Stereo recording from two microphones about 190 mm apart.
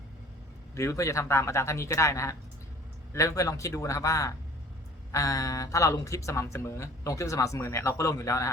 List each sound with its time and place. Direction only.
0.8 s speech: 15° left (ahead or behind)